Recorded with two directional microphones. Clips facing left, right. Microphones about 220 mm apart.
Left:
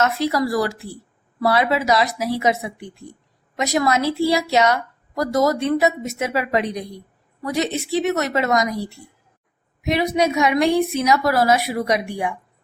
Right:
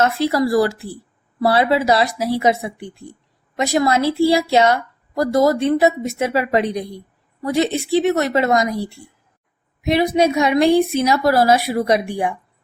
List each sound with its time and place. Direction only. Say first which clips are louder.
0.0 s a woman's voice: right 3 dB; 30° right (ahead or behind)
9.8 s a woman's voice: right 3 dB; 30° right (ahead or behind)